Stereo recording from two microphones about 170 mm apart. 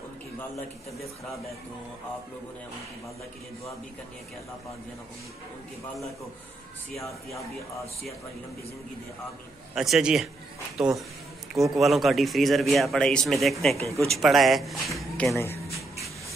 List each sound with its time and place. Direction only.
7.0 s a man's voice: centre (ahead or behind)
9.8 s a man's voice: centre (ahead or behind)
15.3 s a sound: 15° left (ahead or behind)